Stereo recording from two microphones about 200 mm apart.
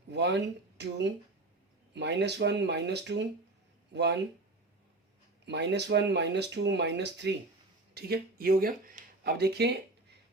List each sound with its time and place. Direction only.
0.1 s speech: 60° right (ahead or behind)
5.5 s speech: 60° right (ahead or behind)